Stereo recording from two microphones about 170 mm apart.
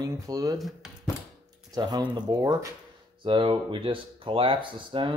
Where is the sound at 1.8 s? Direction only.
25° right (ahead or behind).